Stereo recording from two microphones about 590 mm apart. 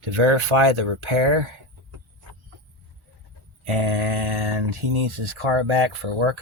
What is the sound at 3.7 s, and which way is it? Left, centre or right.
Speech, right.